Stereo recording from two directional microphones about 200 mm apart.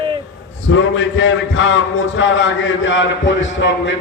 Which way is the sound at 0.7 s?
70° left (ahead or behind).